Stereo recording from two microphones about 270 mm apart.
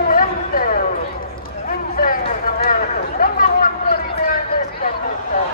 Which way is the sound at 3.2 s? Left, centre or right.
Left.